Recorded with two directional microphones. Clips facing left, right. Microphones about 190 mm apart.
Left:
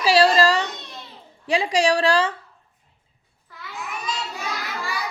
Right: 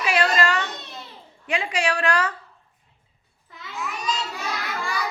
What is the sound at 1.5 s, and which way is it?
Speech, 35° left (ahead or behind).